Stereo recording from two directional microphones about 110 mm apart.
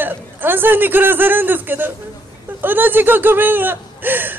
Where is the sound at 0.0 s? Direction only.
20° right (ahead or behind).